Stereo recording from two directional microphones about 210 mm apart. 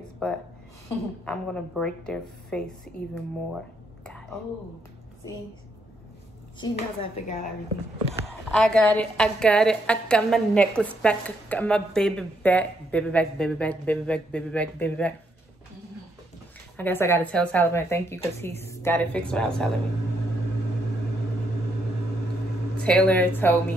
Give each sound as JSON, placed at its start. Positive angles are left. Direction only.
{"t": 0.2, "sound": "a woman's voice", "side_deg": 5}
{"t": 6.7, "sound": "speech", "side_deg": 35}
{"t": 8.5, "sound": "a woman's voice", "side_deg": 5}
{"t": 16.7, "sound": "a woman's voice", "side_deg": 10}
{"t": 22.8, "sound": "speech", "side_deg": 5}